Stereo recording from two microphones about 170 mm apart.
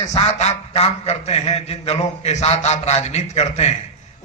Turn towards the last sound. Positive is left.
turn(degrees=40)  # may be behind; listen again after turning